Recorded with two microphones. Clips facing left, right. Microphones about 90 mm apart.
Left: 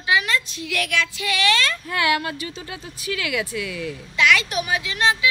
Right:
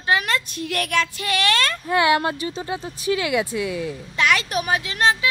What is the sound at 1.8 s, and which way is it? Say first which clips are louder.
Speech: right 7 dB; 25° right (ahead or behind).